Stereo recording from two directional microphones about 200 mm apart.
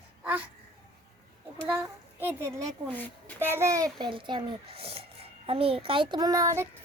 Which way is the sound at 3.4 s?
10° right (ahead or behind).